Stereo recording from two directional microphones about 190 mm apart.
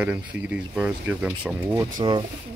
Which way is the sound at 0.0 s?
10° right (ahead or behind).